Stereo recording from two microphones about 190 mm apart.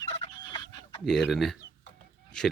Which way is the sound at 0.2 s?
20° left (ahead or behind).